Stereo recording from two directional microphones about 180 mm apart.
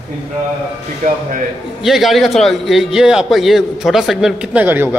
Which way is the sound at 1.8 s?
Centre (ahead or behind).